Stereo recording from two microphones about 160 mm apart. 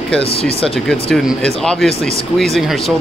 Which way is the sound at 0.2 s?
35° left (ahead or behind).